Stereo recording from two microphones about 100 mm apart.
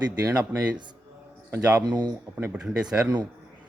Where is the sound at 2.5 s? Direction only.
10° right (ahead or behind).